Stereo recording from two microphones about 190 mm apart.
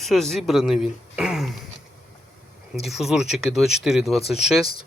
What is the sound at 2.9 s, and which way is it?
Speech, centre (ahead or behind).